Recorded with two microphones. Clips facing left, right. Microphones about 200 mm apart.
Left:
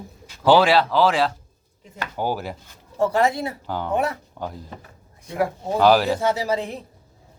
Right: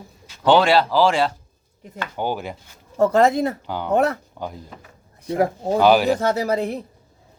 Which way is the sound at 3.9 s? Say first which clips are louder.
Right 5 dB; 45° right (ahead or behind).